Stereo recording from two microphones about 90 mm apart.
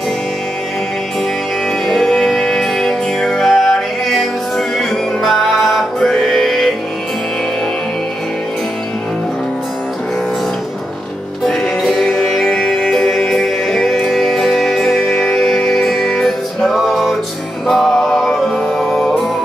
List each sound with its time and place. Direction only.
1.9 s music: 5° left (ahead or behind)
11.4 s music: 5° left (ahead or behind)